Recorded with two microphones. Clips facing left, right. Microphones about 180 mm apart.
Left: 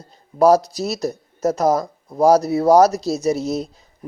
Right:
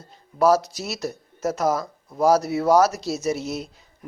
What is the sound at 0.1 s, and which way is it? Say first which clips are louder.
Speech: left 5 dB; 40° left (ahead or behind).